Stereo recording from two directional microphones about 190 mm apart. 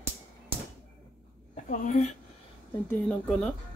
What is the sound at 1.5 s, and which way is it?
Speech, 40° left (ahead or behind).